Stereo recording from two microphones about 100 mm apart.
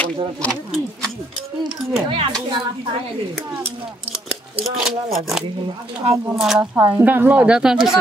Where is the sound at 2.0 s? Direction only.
65° right (ahead or behind).